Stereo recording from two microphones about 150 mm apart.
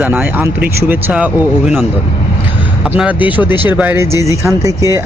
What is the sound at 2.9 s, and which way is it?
Speech, 10° right (ahead or behind).